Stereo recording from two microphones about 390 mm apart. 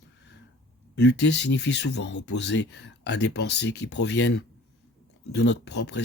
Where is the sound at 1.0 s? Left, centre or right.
Left.